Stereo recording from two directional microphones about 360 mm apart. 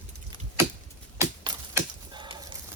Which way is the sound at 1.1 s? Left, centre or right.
Centre.